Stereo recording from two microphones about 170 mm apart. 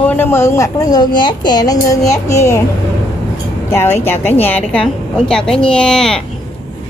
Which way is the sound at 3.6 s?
15° left (ahead or behind).